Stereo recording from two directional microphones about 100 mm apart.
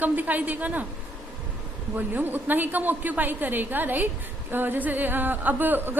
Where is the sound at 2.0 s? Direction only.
20° right (ahead or behind).